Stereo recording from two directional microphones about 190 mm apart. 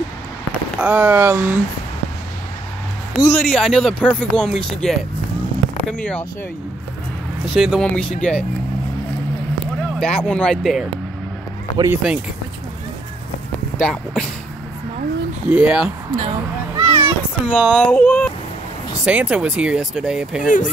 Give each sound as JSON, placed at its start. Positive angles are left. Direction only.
{"t": 0.7, "sound": "speech", "side_deg": -5}
{"t": 3.2, "sound": "speech", "side_deg": 10}
{"t": 7.5, "sound": "speech", "side_deg": 0}
{"t": 9.8, "sound": "speech", "side_deg": 5}
{"t": 11.7, "sound": "speech", "side_deg": -20}
{"t": 13.7, "sound": "speech", "side_deg": 5}
{"t": 15.5, "sound": "speech", "side_deg": -5}
{"t": 16.7, "sound": "a sound", "side_deg": -15}
{"t": 17.5, "sound": "speech", "side_deg": 0}
{"t": 19.0, "sound": "speech", "side_deg": -5}
{"t": 20.4, "sound": "speech", "side_deg": 45}